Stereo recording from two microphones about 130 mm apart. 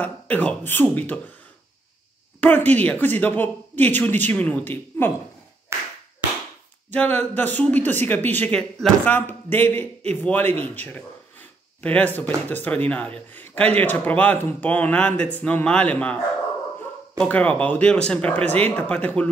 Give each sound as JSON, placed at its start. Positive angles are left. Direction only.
{"t": 0.0, "sound": "a man's voice", "side_deg": 10}
{"t": 2.4, "sound": "a man's voice", "side_deg": 15}
{"t": 5.7, "sound": "clapping", "side_deg": -20}
{"t": 6.9, "sound": "a man's voice", "side_deg": 10}
{"t": 17.2, "sound": "a man's voice", "side_deg": 10}